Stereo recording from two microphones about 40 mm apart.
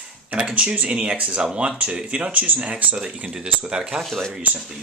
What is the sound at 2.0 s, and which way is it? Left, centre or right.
Speech, right.